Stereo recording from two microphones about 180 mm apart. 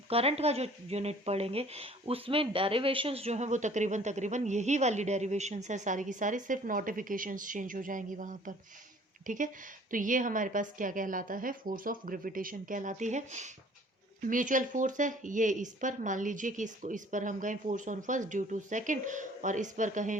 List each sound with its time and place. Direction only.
0.1 s speech: 35° right (ahead or behind)